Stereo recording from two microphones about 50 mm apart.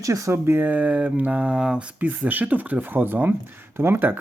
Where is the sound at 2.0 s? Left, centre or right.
Right.